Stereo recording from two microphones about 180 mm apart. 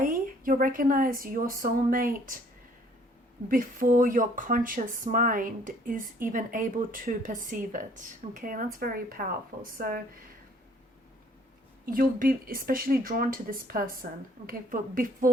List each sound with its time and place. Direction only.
0.0 s speech: 50° right (ahead or behind)
3.5 s speech: 50° right (ahead or behind)
11.9 s speech: 50° right (ahead or behind)